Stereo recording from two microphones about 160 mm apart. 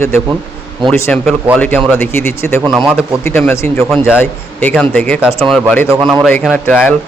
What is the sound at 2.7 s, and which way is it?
Speech, 5° right (ahead or behind).